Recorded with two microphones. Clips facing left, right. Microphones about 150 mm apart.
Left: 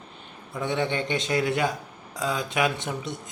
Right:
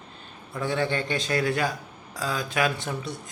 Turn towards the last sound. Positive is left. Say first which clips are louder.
# left 1 dB
turn(degrees=20)  # may be behind; listen again after turning